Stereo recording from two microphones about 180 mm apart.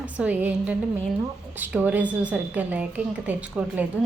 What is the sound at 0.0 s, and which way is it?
A woman's voice, 10° right (ahead or behind).